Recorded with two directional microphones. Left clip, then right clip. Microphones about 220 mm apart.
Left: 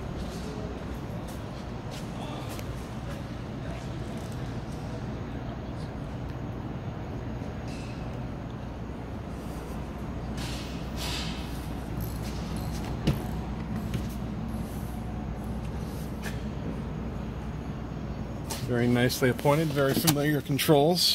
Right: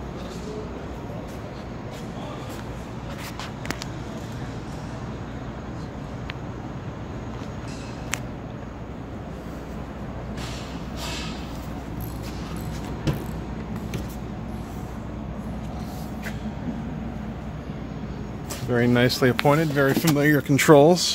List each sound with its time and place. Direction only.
18.7 s speech: 20° right (ahead or behind)